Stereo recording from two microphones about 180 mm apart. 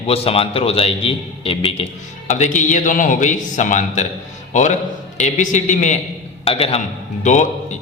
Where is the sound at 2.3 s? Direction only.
40° left (ahead or behind).